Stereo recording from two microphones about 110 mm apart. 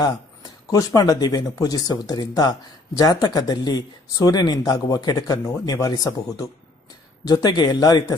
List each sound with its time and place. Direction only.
0.7 s speech: 35° left (ahead or behind)